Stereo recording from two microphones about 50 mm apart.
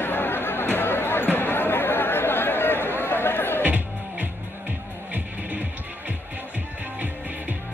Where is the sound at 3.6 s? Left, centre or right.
Right.